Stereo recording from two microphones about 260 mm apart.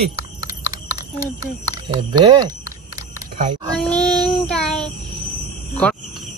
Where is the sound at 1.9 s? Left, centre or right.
Centre.